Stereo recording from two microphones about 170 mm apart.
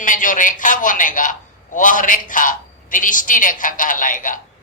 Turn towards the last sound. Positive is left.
turn(degrees=50)  # may be behind; listen again after turning